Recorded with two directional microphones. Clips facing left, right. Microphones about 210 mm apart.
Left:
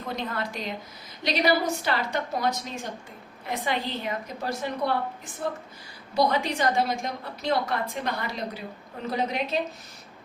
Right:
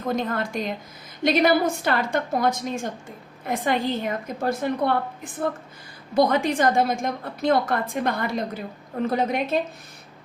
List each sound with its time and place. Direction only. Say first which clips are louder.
0.0 s a woman's voice: right 6 dB; 45° right (ahead or behind)